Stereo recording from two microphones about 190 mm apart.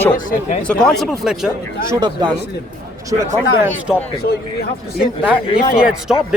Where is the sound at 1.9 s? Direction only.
20° right (ahead or behind).